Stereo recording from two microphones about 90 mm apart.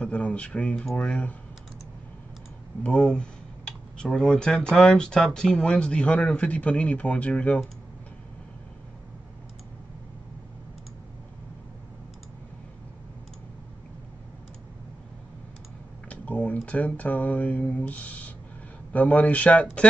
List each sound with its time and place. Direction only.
0.0 s speech: 15° left (ahead or behind)
2.8 s speech: 10° left (ahead or behind)
16.1 s speech: 15° left (ahead or behind)